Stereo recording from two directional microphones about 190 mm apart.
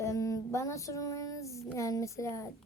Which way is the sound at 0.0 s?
15° left (ahead or behind).